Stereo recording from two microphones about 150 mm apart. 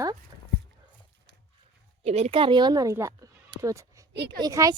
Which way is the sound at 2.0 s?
45° right (ahead or behind).